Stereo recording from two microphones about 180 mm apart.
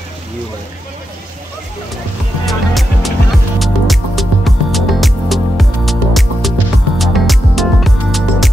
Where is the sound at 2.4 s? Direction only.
Centre (ahead or behind).